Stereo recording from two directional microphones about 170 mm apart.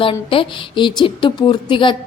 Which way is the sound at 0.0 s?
30° left (ahead or behind).